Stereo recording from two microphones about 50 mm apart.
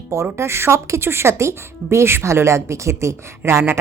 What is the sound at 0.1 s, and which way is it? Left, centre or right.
Speech, right.